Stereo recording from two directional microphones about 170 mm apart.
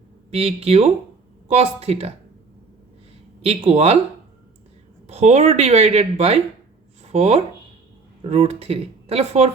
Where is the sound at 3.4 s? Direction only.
35° right (ahead or behind).